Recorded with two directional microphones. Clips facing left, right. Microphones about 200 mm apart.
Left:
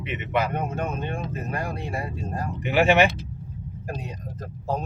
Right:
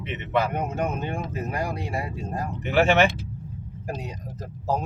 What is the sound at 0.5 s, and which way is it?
Speech, 15° right (ahead or behind).